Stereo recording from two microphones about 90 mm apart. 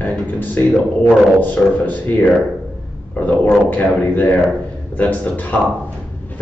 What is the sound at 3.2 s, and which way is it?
A man's voice, 20° left (ahead or behind).